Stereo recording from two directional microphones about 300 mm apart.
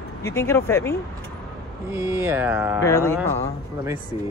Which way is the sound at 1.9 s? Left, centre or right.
Centre.